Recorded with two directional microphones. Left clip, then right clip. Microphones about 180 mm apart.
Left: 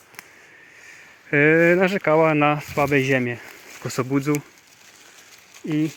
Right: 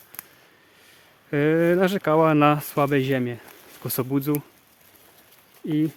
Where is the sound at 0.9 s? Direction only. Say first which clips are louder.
Left 6 dB; 5° right (ahead or behind).